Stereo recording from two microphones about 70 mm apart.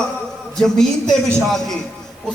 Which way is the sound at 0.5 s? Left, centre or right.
Centre.